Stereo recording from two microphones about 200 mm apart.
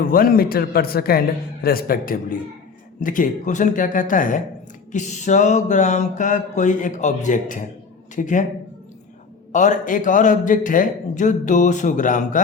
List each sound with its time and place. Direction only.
0.0 s a man's voice: 45° left (ahead or behind)
9.5 s a man's voice: 40° left (ahead or behind)